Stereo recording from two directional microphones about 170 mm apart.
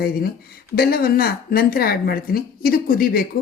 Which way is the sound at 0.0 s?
65° left (ahead or behind).